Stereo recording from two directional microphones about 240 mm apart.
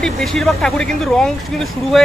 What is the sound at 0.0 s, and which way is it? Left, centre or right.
A man's voice, centre.